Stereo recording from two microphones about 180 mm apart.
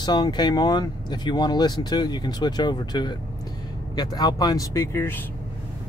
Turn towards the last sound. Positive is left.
turn(degrees=15)  # may be behind; listen again after turning